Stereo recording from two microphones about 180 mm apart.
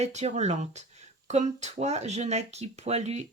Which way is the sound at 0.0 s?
35° right (ahead or behind).